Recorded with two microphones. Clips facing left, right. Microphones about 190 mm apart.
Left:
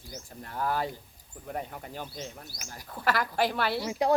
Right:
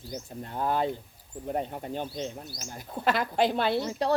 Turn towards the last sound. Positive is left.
turn(degrees=10)  # may be behind; listen again after turning